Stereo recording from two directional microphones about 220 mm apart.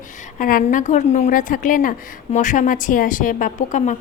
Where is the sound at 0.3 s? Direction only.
40° left (ahead or behind).